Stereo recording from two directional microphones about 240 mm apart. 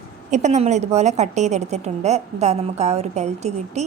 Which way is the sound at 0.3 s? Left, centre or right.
Right.